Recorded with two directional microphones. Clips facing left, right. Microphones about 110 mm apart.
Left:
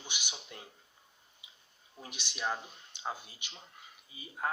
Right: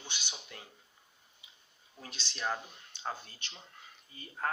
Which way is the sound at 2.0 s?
15° left (ahead or behind).